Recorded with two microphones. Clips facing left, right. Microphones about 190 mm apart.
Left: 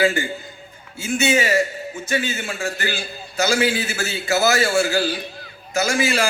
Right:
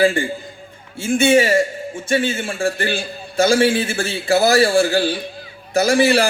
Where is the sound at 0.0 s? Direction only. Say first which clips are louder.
Right 3 dB; 30° right (ahead or behind).